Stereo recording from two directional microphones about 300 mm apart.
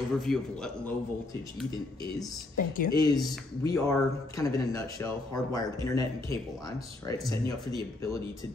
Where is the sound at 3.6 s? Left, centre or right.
Centre.